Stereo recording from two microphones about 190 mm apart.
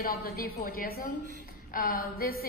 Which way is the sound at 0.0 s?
50° left (ahead or behind).